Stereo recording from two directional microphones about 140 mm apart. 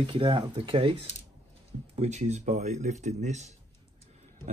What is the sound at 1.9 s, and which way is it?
Speech, 55° right (ahead or behind).